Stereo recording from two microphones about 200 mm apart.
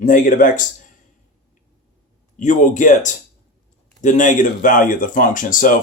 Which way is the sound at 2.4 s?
40° left (ahead or behind).